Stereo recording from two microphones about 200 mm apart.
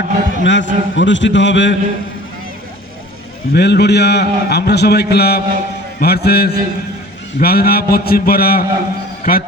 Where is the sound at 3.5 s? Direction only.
55° left (ahead or behind).